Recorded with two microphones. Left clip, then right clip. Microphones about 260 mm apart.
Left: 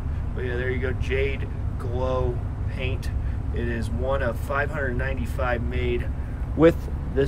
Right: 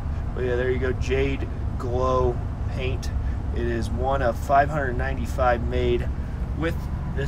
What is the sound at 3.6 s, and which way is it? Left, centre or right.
Speech, centre.